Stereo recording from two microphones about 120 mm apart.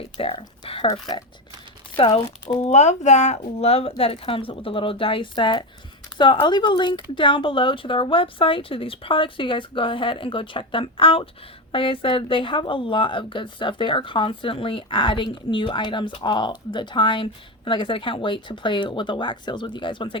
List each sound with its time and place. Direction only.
0.2 s speech: 50° left (ahead or behind)
0.6 s a sound: 45° left (ahead or behind)
2.0 s speech: 50° left (ahead or behind)
2.6 s speech: 70° left (ahead or behind); by 20.1 s 45° left (ahead or behind)